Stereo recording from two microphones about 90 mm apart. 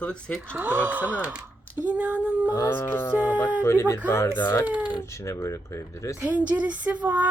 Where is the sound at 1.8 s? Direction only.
15° right (ahead or behind).